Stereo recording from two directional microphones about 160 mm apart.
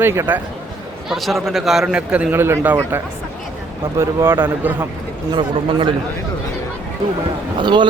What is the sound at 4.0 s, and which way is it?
Speech, 15° right (ahead or behind).